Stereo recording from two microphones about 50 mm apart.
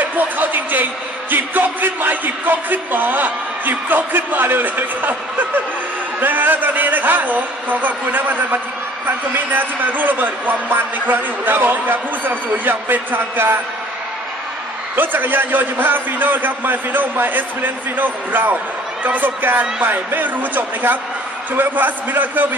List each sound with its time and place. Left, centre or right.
0.0 s a man's voice: right
15.0 s a man's voice: right